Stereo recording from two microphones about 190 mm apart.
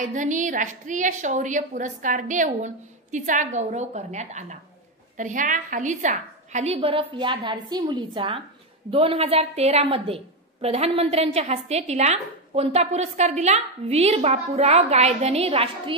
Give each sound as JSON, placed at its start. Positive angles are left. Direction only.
{"t": 0.0, "sound": "a woman's voice", "side_deg": -40}